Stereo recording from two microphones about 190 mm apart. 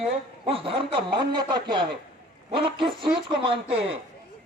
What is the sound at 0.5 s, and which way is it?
Speech, 30° right (ahead or behind).